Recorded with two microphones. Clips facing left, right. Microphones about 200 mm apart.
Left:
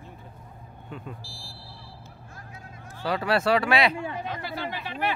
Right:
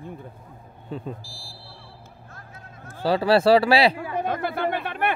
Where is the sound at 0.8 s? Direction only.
35° right (ahead or behind).